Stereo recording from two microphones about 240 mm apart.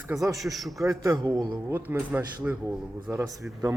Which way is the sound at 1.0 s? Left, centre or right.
Centre.